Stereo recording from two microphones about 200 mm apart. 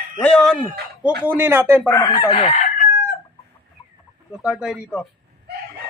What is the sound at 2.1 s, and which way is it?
Chicken, 20° left (ahead or behind).